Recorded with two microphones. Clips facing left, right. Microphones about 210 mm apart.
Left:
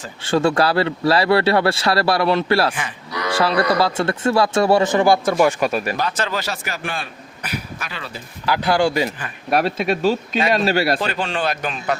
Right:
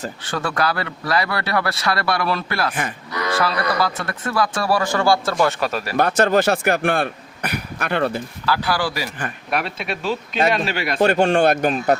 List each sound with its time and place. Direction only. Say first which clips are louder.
0.2 s speech: left 8 dB; 25° left (ahead or behind)
6.0 s speech: right 7 dB; 50° right (ahead or behind)
8.4 s speech: left 5 dB; 20° left (ahead or behind)
9.5 s speech: left 7 dB; 40° left (ahead or behind)
11.0 s speech: right 7 dB; 50° right (ahead or behind)